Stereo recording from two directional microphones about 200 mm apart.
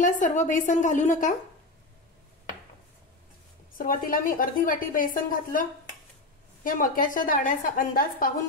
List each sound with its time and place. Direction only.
0.0 s a woman's voice: 40° left (ahead or behind)
3.7 s a woman's voice: 45° left (ahead or behind)